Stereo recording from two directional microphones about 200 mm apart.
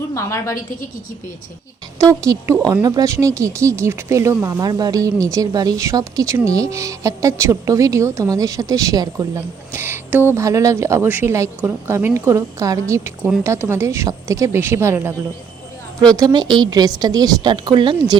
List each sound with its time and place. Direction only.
0.1 s a woman's voice: 15° left (ahead or behind)
2.0 s speech: 15° right (ahead or behind)
16.1 s a woman's voice: 20° right (ahead or behind)